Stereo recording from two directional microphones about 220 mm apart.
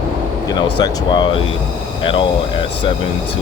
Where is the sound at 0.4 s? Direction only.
20° left (ahead or behind).